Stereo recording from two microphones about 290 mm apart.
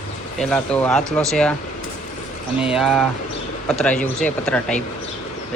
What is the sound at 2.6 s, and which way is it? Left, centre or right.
Speech, centre.